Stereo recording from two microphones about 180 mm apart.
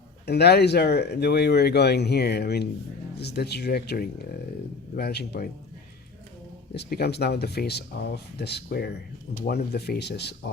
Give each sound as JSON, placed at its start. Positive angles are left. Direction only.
{"t": 0.3, "sound": "speech", "side_deg": 65}
{"t": 6.7, "sound": "speech", "side_deg": 65}